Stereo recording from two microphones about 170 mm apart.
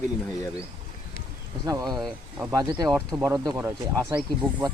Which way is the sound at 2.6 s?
25° right (ahead or behind).